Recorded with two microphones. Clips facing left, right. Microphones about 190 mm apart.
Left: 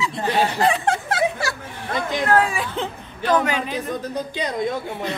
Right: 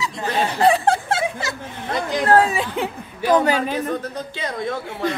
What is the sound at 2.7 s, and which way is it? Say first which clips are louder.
Chuckle: right 2 dB; 10° right (ahead or behind).